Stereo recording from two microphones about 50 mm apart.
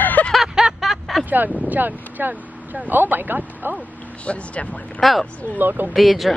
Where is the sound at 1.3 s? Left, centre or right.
Right.